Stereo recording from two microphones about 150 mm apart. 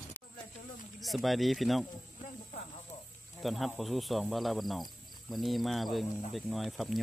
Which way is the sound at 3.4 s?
Centre (ahead or behind).